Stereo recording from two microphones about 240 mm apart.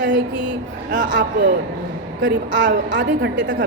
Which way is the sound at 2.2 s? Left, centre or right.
Right.